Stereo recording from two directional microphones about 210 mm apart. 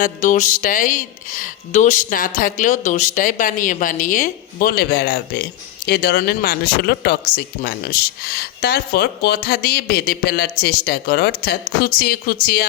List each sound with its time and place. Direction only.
0.0 s speech: 35° left (ahead or behind)